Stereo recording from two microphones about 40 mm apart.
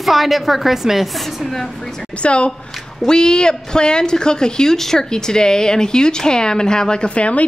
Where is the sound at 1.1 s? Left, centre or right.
Centre.